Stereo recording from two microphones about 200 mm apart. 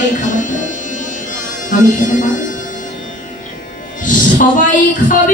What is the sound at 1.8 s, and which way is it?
Speech, 40° left (ahead or behind).